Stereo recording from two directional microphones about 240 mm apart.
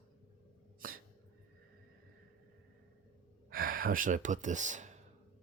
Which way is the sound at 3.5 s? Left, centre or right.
Right.